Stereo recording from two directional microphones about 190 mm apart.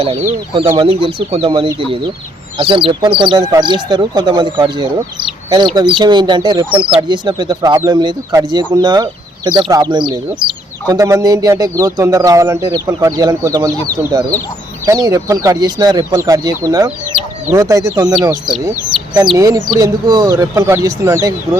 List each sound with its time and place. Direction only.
0.0 s speech: 30° right (ahead or behind); by 21.6 s 15° right (ahead or behind)